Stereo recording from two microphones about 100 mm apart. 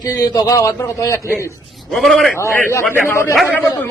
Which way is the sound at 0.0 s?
40° left (ahead or behind).